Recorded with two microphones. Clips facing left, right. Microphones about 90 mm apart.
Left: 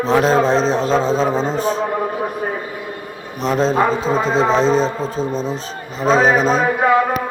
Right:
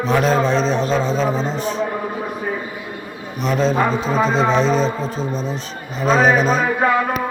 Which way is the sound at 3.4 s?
35° left (ahead or behind).